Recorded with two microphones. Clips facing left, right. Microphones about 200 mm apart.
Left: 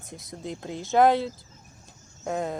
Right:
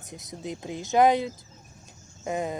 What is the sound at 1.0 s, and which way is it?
Speech, 15° right (ahead or behind).